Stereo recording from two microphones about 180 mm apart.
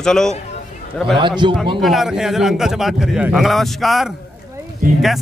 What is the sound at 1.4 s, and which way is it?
Speech, 25° right (ahead or behind).